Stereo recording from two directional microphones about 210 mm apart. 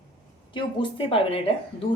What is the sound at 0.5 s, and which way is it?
Speech, 25° left (ahead or behind).